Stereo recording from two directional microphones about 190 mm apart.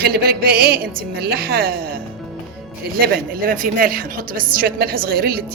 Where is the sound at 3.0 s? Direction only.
45° right (ahead or behind).